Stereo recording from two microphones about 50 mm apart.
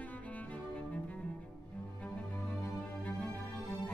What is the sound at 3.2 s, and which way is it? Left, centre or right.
Music, left.